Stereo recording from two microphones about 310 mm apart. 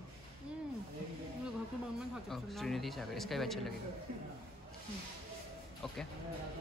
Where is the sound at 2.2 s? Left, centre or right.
Centre.